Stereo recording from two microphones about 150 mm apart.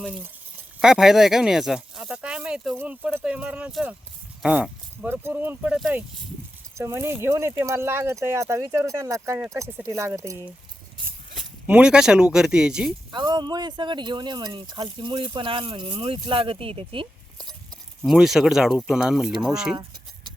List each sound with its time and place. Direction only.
0.8 s speech: 5° right (ahead or behind)
6.7 s speech: 20° right (ahead or behind)
11.6 s speech: 5° right (ahead or behind)
13.1 s speech: 30° right (ahead or behind)
18.0 s speech: centre (ahead or behind)